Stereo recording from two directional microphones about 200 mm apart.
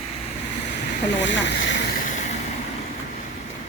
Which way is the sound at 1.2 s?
65° left (ahead or behind).